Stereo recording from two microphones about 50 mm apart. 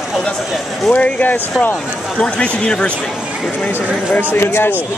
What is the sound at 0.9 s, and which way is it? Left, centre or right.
Speech, left.